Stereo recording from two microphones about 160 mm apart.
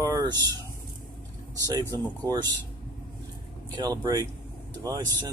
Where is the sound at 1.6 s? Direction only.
25° right (ahead or behind).